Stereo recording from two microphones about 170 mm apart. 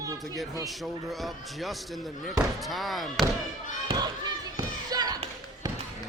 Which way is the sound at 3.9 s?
25° right (ahead or behind).